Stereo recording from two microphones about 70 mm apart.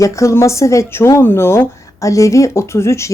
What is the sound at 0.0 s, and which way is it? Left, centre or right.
Speech, left.